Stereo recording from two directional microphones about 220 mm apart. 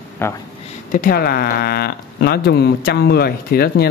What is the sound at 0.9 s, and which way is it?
Speech, 40° left (ahead or behind).